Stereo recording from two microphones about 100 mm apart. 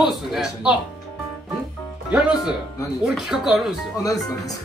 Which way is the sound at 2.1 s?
10° right (ahead or behind).